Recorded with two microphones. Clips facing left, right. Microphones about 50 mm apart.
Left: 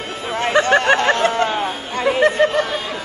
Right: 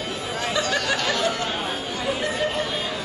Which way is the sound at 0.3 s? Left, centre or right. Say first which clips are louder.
Left 10 dB; left.